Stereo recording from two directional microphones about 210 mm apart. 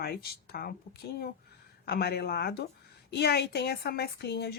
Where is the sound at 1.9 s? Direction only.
50° left (ahead or behind).